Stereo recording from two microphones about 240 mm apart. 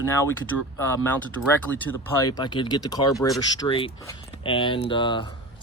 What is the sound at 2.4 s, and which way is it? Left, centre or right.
Speech, centre.